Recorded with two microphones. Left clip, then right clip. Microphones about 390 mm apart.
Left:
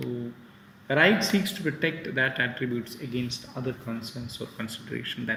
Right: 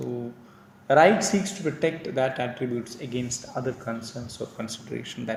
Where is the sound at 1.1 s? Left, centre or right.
Right.